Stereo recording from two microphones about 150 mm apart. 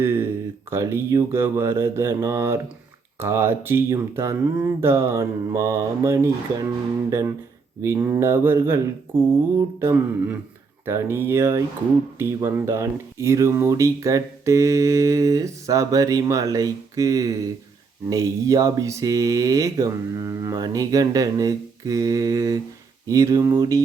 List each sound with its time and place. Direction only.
0.0 s a sound: 15° right (ahead or behind)
0.7 s speech: 15° right (ahead or behind)
7.8 s speech: 20° right (ahead or behind)